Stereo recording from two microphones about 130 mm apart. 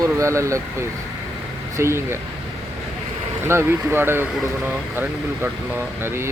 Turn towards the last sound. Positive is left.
turn(degrees=-20)  # may be behind; listen again after turning